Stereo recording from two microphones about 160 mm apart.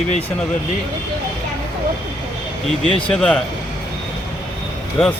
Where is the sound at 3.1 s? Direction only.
5° left (ahead or behind).